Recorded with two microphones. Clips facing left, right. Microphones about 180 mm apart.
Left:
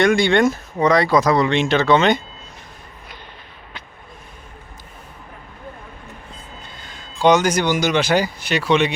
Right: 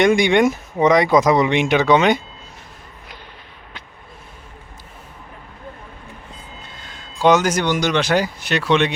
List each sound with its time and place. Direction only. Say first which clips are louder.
0.0 s speech: right 1 dB; 15° right (ahead or behind)
6.8 s speech: even; centre (ahead or behind)